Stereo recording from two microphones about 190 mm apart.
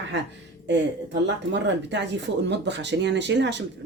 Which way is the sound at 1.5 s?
65° right (ahead or behind).